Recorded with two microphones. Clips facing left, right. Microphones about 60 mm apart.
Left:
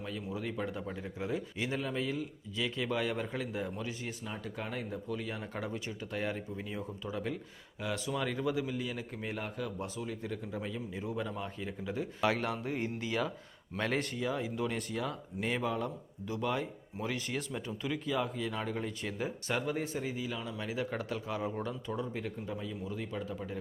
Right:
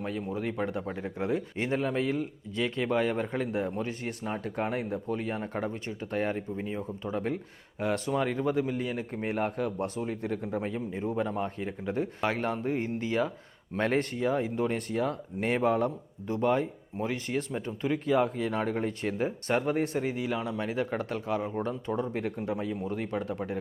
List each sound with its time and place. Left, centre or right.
0.0 s speech: right
5.0 s speech: right
6.3 s speech: right
8.1 s speech: right
12.2 s speech: right
16.3 s speech: right
18.0 s speech: right
19.6 s speech: right